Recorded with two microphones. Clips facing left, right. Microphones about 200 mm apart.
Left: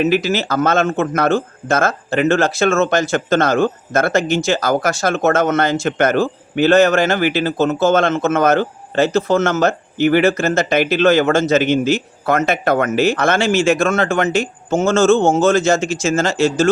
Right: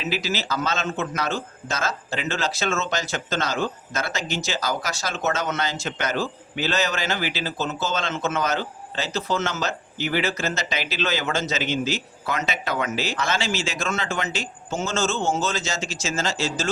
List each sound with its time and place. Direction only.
0.0 s speech: 55° left (ahead or behind)